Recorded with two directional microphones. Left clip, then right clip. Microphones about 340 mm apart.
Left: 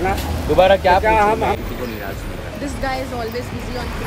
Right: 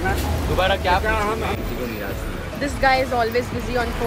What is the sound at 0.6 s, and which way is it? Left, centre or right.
Speech, left.